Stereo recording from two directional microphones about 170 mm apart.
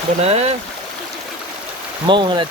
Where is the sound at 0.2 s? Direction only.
40° right (ahead or behind).